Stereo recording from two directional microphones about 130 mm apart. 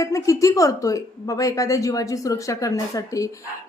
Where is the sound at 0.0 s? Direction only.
25° left (ahead or behind).